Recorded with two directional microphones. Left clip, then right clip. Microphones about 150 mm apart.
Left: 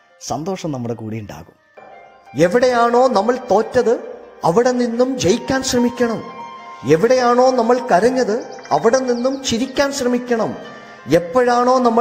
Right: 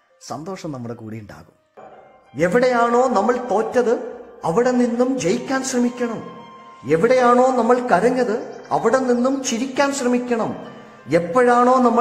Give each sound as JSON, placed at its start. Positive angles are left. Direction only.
{"t": 0.3, "sound": "speech", "side_deg": 15}
{"t": 2.3, "sound": "a man's voice", "side_deg": 25}